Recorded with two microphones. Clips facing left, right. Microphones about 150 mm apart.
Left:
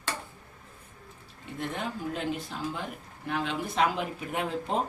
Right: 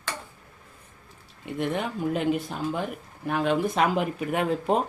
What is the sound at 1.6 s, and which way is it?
Speech, 60° right (ahead or behind).